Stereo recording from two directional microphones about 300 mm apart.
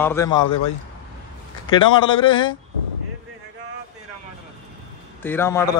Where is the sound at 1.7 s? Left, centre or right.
Centre.